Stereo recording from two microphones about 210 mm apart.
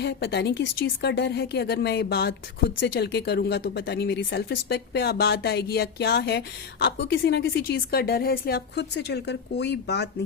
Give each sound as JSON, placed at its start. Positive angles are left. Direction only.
{"t": 0.0, "sound": "speech", "side_deg": 50}